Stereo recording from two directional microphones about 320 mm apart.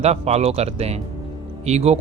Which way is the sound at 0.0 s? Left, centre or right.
Centre.